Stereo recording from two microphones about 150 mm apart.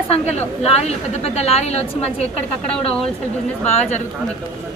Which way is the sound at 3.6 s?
50° left (ahead or behind).